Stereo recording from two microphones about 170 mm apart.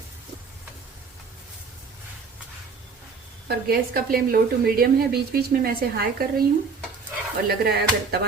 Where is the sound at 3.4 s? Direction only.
65° right (ahead or behind).